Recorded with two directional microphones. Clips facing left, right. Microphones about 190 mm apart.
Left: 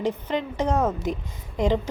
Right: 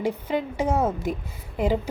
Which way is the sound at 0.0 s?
10° right (ahead or behind).